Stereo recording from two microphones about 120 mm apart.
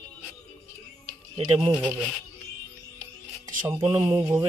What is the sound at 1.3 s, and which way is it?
Speech, 45° right (ahead or behind).